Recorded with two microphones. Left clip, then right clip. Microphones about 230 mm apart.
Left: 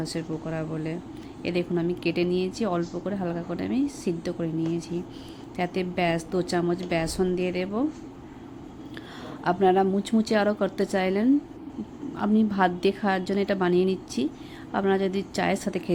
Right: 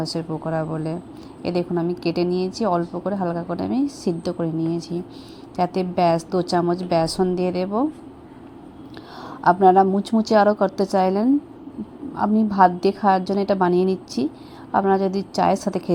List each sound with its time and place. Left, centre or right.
0.1 s a woman's voice: centre
9.4 s a woman's voice: centre